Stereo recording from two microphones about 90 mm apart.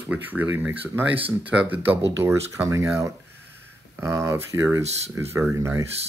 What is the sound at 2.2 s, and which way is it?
Speech, 35° right (ahead or behind).